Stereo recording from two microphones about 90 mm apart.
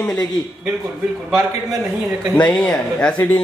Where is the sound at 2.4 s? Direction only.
15° left (ahead or behind).